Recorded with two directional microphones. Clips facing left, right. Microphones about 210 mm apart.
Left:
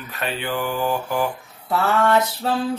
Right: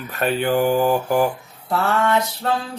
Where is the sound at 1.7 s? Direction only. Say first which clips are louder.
Left 1 dB; centre (ahead or behind).